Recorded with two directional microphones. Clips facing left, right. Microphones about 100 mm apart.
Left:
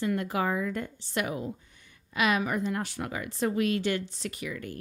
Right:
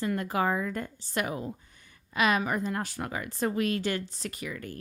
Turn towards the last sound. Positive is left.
turn(degrees=-40)  # may be behind; listen again after turning